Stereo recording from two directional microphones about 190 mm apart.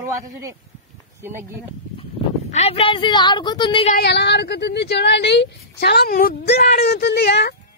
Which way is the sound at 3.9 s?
60° left (ahead or behind).